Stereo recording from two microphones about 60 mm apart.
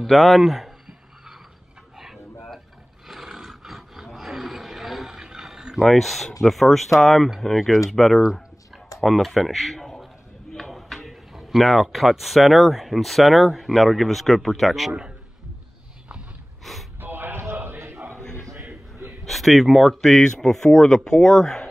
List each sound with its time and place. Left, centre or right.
0.0 s a sound: centre
3.1 s wild animals: centre
5.9 s speech: centre
14.9 s a man's voice: centre
16.7 s speech: centre
17.0 s a sound: right
17.7 s chant: right
18.2 s a sound: centre
19.2 s speech: centre